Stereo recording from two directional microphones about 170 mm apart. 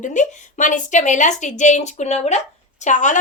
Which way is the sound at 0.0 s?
45° left (ahead or behind).